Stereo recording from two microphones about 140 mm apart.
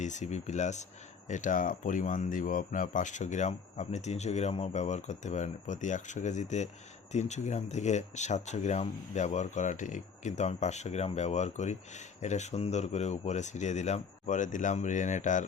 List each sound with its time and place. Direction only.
0.0 s speech: 60° left (ahead or behind)